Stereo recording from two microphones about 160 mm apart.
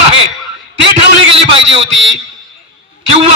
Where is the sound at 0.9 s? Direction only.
35° right (ahead or behind).